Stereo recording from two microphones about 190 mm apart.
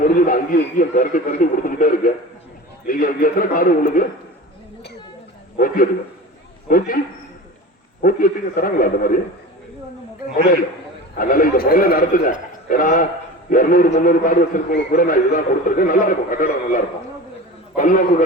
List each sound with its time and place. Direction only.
0.0 s a man's voice: 45° left (ahead or behind)
5.5 s a man's voice: 45° left (ahead or behind)
8.0 s a man's voice: 50° left (ahead or behind)
11.2 s a man's voice: 45° left (ahead or behind)